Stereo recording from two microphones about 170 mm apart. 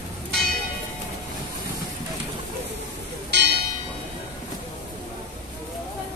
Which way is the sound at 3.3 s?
90° right.